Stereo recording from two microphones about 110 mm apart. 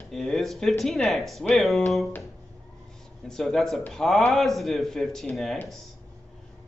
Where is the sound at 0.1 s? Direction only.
Centre (ahead or behind).